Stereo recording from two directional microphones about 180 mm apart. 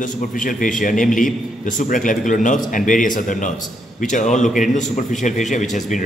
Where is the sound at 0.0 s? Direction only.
50° left (ahead or behind).